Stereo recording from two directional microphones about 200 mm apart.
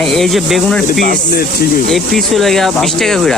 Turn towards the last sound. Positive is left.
turn(degrees=0)  # may be behind; listen again after turning